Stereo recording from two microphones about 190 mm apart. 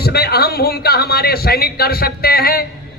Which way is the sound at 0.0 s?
55° left (ahead or behind).